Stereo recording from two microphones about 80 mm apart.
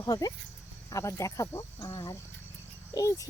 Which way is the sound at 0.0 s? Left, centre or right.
Left.